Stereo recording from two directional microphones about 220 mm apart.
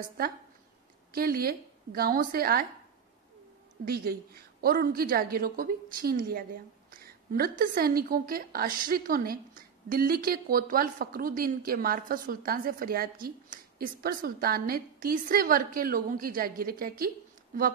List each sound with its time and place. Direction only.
1.1 s a woman's voice: 45° right (ahead or behind)
3.8 s a woman's voice: 45° right (ahead or behind)